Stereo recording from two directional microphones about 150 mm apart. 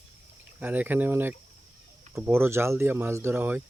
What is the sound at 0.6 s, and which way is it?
Speech, 10° right (ahead or behind).